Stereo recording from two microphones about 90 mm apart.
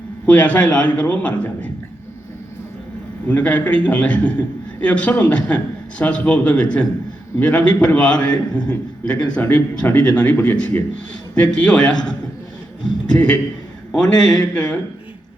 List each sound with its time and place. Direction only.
0.3 s a man's voice: 15° left (ahead or behind)
3.2 s a man's voice: 15° left (ahead or behind)
11.3 s a man's voice: 15° left (ahead or behind)